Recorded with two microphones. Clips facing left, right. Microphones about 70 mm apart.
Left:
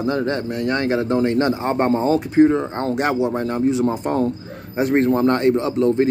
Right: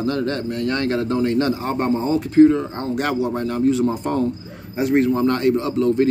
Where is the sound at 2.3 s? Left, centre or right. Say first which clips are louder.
Right 4 dB; left.